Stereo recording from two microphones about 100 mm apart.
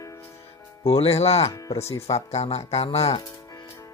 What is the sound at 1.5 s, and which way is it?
Speech, 35° left (ahead or behind).